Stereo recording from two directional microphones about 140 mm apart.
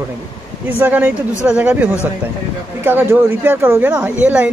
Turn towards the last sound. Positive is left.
turn(degrees=-10)  # may be behind; listen again after turning